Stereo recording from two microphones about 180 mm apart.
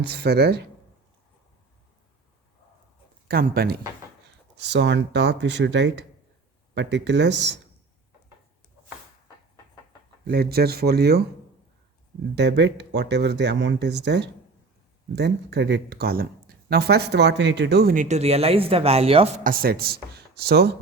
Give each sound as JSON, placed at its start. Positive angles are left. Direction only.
{"t": 0.1, "sound": "speech", "side_deg": -65}
{"t": 3.2, "sound": "speech", "side_deg": -55}
{"t": 4.5, "sound": "speech", "side_deg": -75}
{"t": 10.2, "sound": "speech", "side_deg": -60}
{"t": 12.4, "sound": "speech", "side_deg": -70}
{"t": 19.5, "sound": "speech", "side_deg": -55}